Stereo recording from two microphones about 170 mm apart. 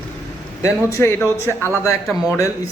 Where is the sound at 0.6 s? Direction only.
15° left (ahead or behind).